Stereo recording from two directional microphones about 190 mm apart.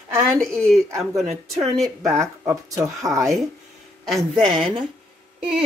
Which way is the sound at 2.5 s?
15° right (ahead or behind).